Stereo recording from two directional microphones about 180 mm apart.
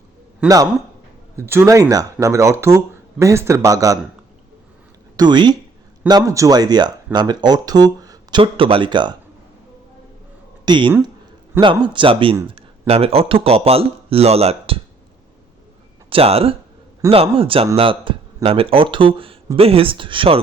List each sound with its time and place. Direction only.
0.4 s speech: 20° right (ahead or behind)
5.1 s speech: 25° right (ahead or behind)
10.7 s speech: 25° right (ahead or behind)
16.0 s speech: 30° right (ahead or behind)